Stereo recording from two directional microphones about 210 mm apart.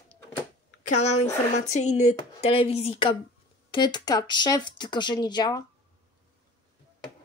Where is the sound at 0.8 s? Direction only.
35° left (ahead or behind).